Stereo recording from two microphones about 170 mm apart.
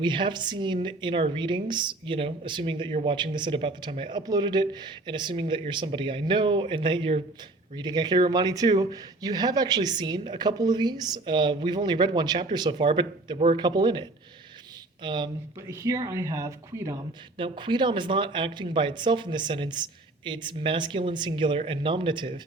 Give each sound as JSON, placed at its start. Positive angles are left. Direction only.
{"t": 0.0, "sound": "a woman's voice", "side_deg": -30}
{"t": 13.6, "sound": "a woman's voice", "side_deg": -25}
{"t": 15.0, "sound": "a woman's voice", "side_deg": -25}
{"t": 17.3, "sound": "a woman's voice", "side_deg": -30}